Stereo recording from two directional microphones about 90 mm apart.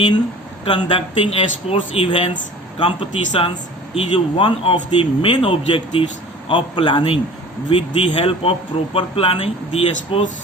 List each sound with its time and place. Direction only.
0.6 s a man's voice: 90° left